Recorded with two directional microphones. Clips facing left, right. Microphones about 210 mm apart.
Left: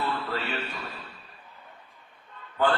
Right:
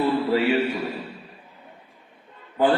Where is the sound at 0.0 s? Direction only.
15° right (ahead or behind).